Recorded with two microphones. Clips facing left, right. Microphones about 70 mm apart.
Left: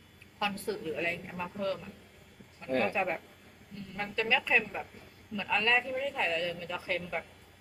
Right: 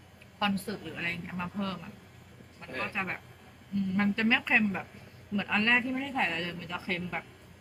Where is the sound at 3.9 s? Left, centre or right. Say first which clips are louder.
Right 3 dB; centre.